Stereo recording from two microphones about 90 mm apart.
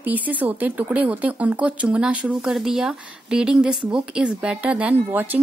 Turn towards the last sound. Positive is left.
turn(degrees=-20)  # may be behind; listen again after turning